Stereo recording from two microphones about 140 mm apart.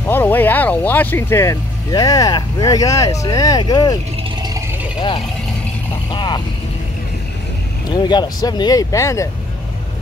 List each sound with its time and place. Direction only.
0.1 s speech: 15° left (ahead or behind); by 4.0 s 30° left (ahead or behind)
6.1 s vehicle: 35° left (ahead or behind)
7.9 s speech: 30° left (ahead or behind)